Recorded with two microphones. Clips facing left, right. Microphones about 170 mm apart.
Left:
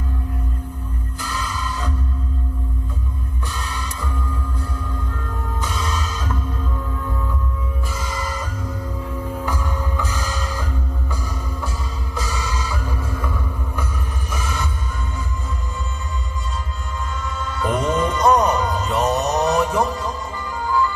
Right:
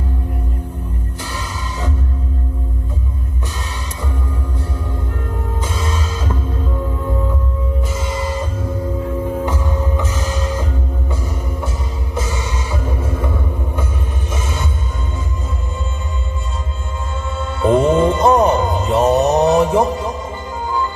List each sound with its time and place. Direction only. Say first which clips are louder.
1.2 s music: left 2 dB; 25° right (ahead or behind)
3.7 s music: right 2 dB; 25° right (ahead or behind)
5.6 s music: right 1 dB; 25° right (ahead or behind)
12.1 s music: right 3 dB; 25° right (ahead or behind)
17.2 s music: right 8 dB; 25° right (ahead or behind)